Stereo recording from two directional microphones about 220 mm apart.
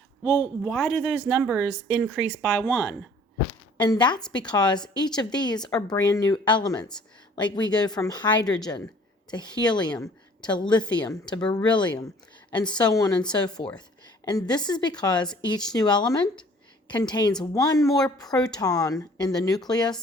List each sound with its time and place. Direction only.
0.3 s speech: 15° left (ahead or behind)
0.7 s speech: centre (ahead or behind)
3.8 s a woman's voice: 20° left (ahead or behind)
5.5 s speech: 5° left (ahead or behind)
5.9 s a woman's voice: 20° left (ahead or behind)